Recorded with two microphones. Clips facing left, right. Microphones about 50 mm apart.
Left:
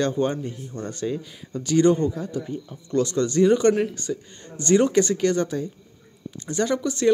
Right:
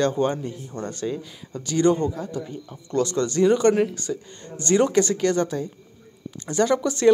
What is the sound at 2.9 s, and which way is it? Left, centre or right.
Speech, centre.